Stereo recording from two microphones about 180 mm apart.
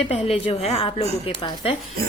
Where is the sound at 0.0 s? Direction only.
35° left (ahead or behind).